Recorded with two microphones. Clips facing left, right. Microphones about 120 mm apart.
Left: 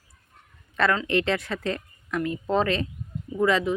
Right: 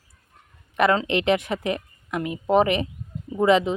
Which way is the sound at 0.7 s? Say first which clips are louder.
Right 3 dB; 15° right (ahead or behind).